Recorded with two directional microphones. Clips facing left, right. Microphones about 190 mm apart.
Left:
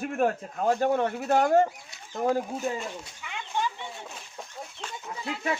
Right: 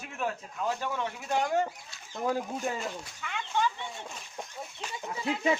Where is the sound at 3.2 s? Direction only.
15° left (ahead or behind).